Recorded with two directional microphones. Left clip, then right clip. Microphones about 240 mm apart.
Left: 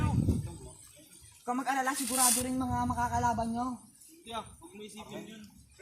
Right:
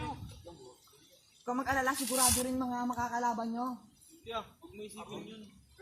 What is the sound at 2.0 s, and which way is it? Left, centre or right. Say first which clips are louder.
Music: left 1 dB; centre.